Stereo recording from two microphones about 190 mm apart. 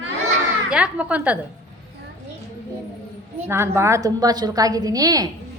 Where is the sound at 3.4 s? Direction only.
15° right (ahead or behind).